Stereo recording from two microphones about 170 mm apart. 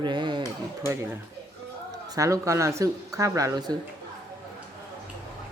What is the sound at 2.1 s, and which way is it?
Speech, 20° right (ahead or behind).